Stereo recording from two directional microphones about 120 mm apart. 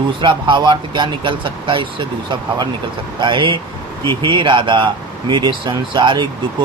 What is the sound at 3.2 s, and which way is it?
Speech, 40° right (ahead or behind).